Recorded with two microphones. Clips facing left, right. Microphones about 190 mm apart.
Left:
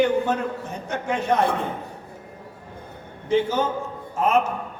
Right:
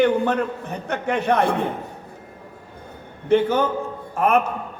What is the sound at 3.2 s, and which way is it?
A man's voice, 60° right (ahead or behind).